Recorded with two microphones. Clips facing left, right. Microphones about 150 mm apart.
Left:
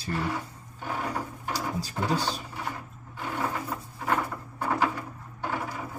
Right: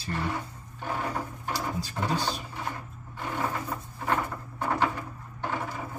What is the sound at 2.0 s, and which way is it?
Speech, 5° left (ahead or behind).